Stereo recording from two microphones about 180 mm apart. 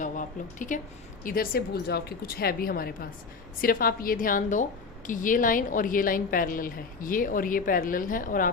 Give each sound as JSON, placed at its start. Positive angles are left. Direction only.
{"t": 0.0, "sound": "a woman's voice", "side_deg": 45}